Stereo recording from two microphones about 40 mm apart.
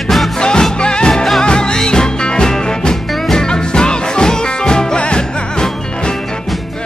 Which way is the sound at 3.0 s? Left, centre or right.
Centre.